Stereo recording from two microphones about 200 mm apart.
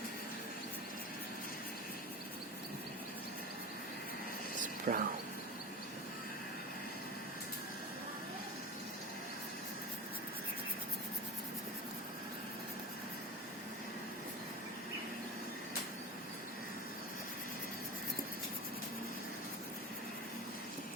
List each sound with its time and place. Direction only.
4.6 s whispering: 40° right (ahead or behind)